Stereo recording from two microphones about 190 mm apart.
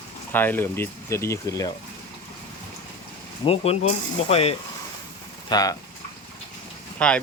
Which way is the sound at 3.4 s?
30° left (ahead or behind).